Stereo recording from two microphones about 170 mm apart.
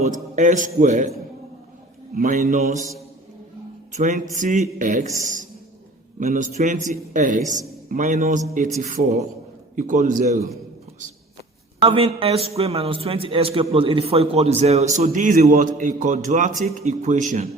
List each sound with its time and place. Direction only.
0.0 s a man's voice: 50° right (ahead or behind)
2.1 s a man's voice: 50° right (ahead or behind)
3.9 s a man's voice: 45° right (ahead or behind)
11.8 s a man's voice: 35° right (ahead or behind)